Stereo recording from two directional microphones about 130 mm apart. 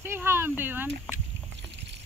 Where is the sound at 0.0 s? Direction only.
20° right (ahead or behind).